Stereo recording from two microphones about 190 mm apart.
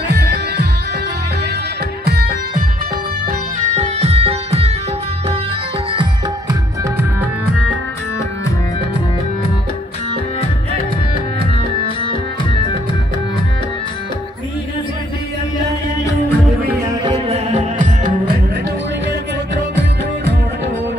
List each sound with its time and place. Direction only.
0.1 s music: 60° right (ahead or behind)
2.0 s music: 55° right (ahead or behind)
3.3 s music: 40° right (ahead or behind)
6.8 s music: 10° right (ahead or behind)
17.0 s music: 25° right (ahead or behind)
17.5 s music: 40° right (ahead or behind)
19.5 s music: 65° right (ahead or behind)